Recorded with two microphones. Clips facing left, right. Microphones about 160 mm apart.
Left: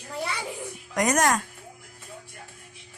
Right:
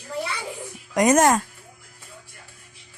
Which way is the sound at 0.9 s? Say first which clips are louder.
Right 6 dB; 25° right (ahead or behind).